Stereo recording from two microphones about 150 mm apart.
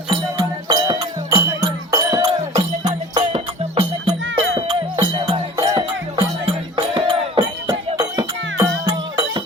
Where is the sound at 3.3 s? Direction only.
40° right (ahead or behind).